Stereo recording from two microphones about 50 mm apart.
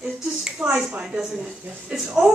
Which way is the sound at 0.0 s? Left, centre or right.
Centre.